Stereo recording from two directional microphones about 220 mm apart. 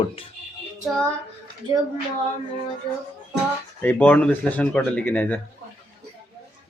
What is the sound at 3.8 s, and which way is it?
Speech, 5° left (ahead or behind).